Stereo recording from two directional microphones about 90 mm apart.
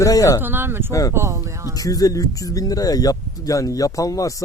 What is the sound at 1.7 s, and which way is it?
Speech, 40° left (ahead or behind).